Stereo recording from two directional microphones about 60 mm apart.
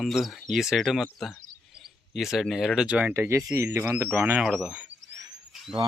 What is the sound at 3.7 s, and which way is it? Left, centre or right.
Speech, right.